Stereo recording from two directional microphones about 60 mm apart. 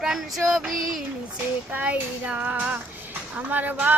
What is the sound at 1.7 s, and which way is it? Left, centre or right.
Speech, right.